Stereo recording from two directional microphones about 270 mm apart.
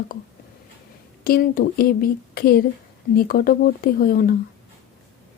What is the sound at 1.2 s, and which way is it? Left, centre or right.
Speech, left.